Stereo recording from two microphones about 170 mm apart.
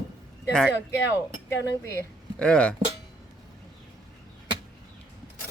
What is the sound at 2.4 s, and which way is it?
Speech, 5° left (ahead or behind).